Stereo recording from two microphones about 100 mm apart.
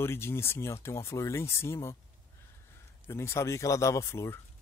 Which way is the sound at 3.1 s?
25° left (ahead or behind).